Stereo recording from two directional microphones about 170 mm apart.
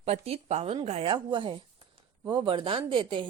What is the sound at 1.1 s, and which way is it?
Speech, 25° right (ahead or behind).